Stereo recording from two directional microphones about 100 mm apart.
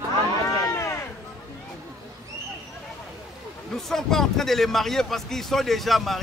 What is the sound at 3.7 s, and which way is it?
Speech, 5° left (ahead or behind).